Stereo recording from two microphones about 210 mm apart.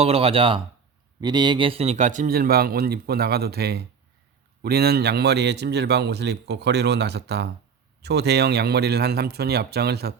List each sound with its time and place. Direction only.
0.0 s a man's voice: 25° right (ahead or behind); by 10.2 s 50° right (ahead or behind)